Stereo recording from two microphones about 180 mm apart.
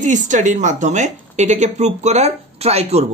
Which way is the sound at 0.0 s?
40° right (ahead or behind).